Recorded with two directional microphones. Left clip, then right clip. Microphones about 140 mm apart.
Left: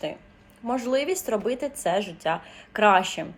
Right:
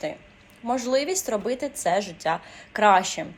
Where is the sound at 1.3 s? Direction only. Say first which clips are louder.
Even; 10° left (ahead or behind).